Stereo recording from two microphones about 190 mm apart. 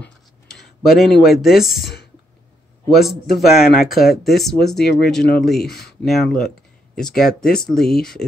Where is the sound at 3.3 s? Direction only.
Centre (ahead or behind).